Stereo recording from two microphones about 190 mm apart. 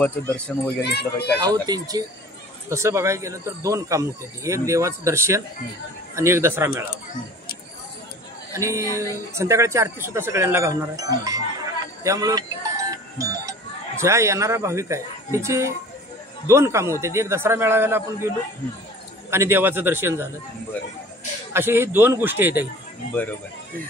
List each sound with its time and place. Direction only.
0.7 s speech: 60° left (ahead or behind)
1.4 s speech: 20° right (ahead or behind)
8.5 s speech: 15° right (ahead or behind)
19.3 s speech: 15° right (ahead or behind)
21.5 s speech: 10° right (ahead or behind)